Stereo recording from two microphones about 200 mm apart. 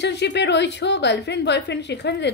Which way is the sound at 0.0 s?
60° left (ahead or behind).